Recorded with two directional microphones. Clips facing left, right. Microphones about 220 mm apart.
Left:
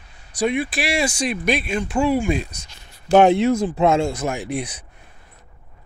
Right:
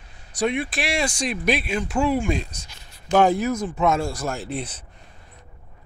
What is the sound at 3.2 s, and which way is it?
Speech, 25° left (ahead or behind).